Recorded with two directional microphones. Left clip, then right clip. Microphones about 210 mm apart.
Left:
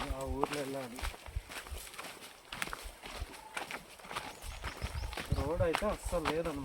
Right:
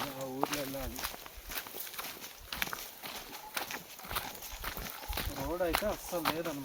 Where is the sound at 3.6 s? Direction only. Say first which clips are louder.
Right 2 dB; 45° right (ahead or behind).